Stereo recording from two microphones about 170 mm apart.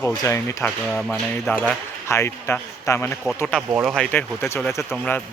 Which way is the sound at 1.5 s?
15° left (ahead or behind).